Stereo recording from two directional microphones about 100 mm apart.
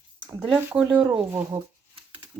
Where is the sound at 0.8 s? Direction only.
15° right (ahead or behind).